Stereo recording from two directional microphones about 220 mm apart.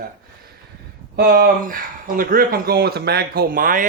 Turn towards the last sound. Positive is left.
turn(degrees=-40)  # may be behind; listen again after turning